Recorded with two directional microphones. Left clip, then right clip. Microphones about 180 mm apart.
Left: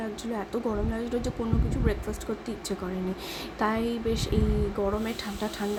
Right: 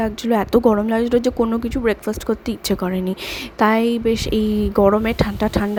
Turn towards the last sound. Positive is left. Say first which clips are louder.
# right 12 dB
turn(degrees=-50)  # may be behind; listen again after turning